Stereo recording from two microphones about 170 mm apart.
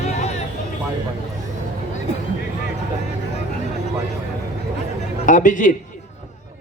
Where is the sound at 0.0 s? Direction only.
40° left (ahead or behind).